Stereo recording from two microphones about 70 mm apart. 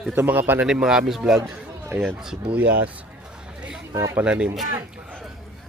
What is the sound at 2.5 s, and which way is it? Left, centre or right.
Speech, right.